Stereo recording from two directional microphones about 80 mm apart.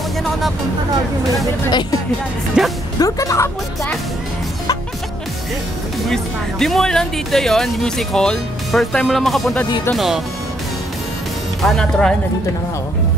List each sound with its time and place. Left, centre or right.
1.7 s speech: left
2.6 s speech: centre
3.0 s speech: left
6.0 s speech: centre
11.6 s speech: centre